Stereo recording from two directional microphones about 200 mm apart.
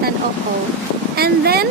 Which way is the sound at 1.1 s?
50° right (ahead or behind).